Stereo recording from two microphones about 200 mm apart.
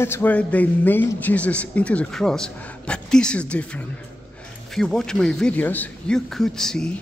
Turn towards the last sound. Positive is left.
turn(degrees=5)  # may be behind; listen again after turning